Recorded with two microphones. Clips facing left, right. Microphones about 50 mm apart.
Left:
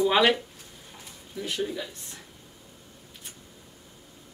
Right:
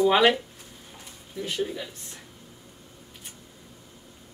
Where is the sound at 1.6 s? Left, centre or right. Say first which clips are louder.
Left 1 dB; centre.